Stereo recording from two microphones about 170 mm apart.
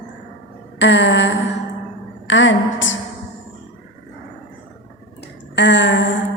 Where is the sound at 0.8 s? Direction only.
90° left.